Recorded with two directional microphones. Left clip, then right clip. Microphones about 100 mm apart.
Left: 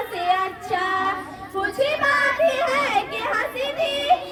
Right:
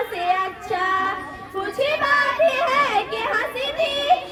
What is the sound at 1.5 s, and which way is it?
Children playing, 20° left (ahead or behind).